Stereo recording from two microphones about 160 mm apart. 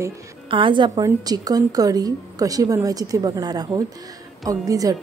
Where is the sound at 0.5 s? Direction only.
30° right (ahead or behind).